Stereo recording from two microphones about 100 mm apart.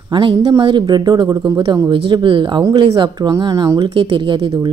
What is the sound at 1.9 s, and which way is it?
A woman's voice, 55° right (ahead or behind).